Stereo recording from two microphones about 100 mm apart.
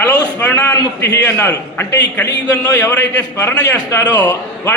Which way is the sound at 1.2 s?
15° left (ahead or behind).